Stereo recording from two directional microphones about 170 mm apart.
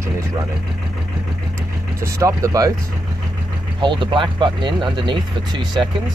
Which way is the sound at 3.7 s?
30° right (ahead or behind).